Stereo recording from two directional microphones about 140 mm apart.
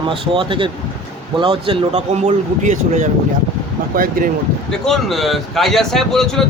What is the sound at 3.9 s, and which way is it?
Speech, 90° right.